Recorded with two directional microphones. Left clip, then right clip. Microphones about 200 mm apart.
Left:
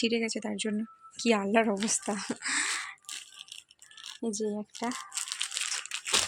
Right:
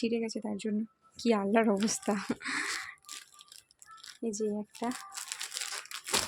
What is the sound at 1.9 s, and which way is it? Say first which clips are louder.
Speech: even; 20° right (ahead or behind).